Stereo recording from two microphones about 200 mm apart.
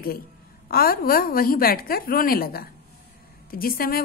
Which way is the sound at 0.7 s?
45° left (ahead or behind).